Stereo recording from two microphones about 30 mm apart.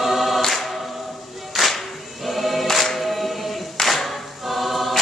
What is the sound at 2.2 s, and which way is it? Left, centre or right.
Choir, centre.